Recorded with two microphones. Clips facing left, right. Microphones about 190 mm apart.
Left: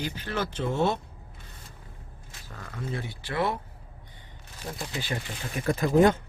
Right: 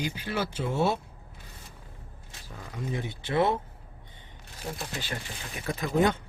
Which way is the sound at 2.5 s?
10° right (ahead or behind).